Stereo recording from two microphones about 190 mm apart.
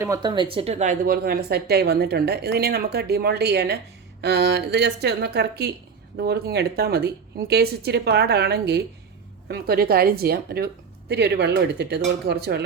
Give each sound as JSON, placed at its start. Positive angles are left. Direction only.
{"t": 0.0, "sound": "speech", "side_deg": -20}